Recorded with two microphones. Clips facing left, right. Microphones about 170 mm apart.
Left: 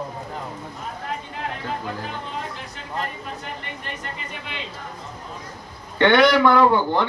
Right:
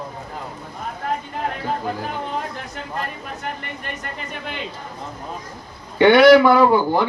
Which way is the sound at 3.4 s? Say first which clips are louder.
Right 4 dB; 50° right (ahead or behind).